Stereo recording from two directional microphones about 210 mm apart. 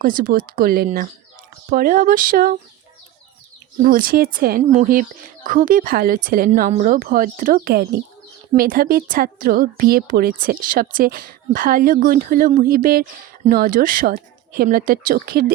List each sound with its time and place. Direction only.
0.0 s a woman's voice: 40° right (ahead or behind)
3.8 s a woman's voice: 40° right (ahead or behind)